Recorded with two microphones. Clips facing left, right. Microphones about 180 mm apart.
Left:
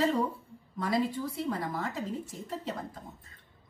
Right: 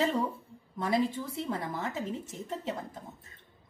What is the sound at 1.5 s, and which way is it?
Speech, 25° right (ahead or behind).